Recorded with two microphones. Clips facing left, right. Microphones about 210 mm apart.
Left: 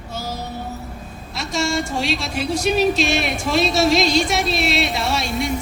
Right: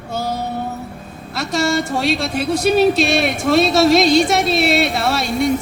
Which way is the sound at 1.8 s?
60° right (ahead or behind).